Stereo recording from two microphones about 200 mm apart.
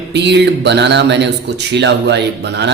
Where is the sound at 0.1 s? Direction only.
60° right (ahead or behind).